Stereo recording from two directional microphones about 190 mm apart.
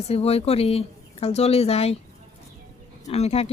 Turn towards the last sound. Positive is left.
turn(degrees=35)  # may be behind; listen again after turning